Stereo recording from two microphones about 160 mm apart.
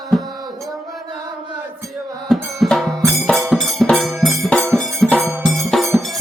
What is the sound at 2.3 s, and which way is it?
Music, centre (ahead or behind).